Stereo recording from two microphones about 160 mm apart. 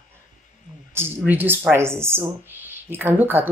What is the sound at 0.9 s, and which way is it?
Speech, 15° right (ahead or behind).